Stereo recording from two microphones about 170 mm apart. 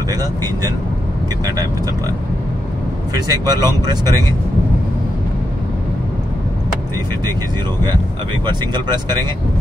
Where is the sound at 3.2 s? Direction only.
25° right (ahead or behind).